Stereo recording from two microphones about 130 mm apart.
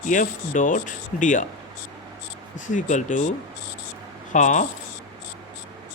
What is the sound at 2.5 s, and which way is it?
Speech, 75° left (ahead or behind).